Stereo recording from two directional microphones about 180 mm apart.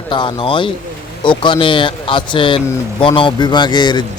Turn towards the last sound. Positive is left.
turn(degrees=25)  # may be behind; listen again after turning